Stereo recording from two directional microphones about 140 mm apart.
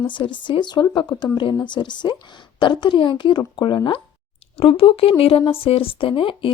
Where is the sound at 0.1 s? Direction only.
35° left (ahead or behind).